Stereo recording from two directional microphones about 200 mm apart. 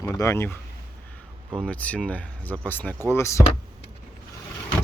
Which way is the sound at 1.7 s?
5° left (ahead or behind).